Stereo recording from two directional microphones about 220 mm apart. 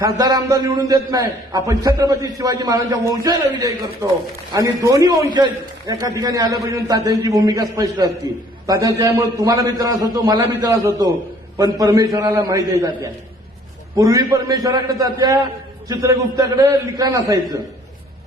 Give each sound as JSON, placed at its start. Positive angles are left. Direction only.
{"t": 0.0, "sound": "a man's voice", "side_deg": -20}
{"t": 13.9, "sound": "a man's voice", "side_deg": -15}